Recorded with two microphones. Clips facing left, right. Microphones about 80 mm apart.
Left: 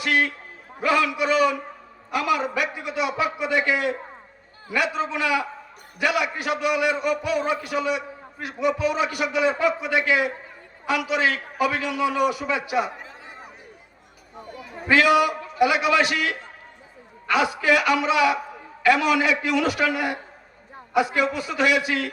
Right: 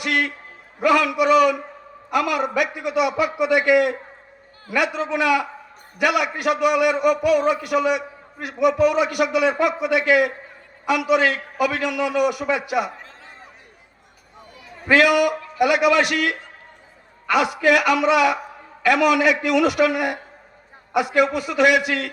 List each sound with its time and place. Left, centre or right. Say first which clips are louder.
0.0 s a sound: even; right
0.9 s a man's voice: right 4 dB; right
14.9 s a man's voice: right 2 dB; right